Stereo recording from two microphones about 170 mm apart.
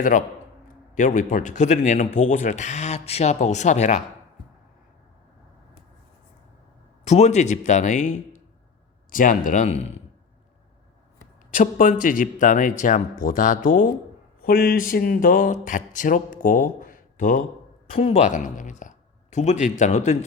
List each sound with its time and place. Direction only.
0.0 s speech: 50° left (ahead or behind)
7.0 s speech: 40° left (ahead or behind)
11.5 s speech: 50° left (ahead or behind)
14.4 s speech: 60° left (ahead or behind); by 20.1 s 45° left (ahead or behind)